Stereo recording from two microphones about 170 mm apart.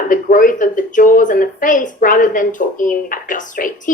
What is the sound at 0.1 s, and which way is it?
A woman's voice, 50° left (ahead or behind).